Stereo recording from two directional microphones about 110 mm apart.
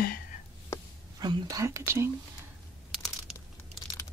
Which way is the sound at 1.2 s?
35° right (ahead or behind).